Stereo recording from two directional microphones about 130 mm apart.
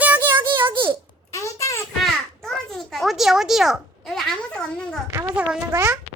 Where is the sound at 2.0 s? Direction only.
5° left (ahead or behind).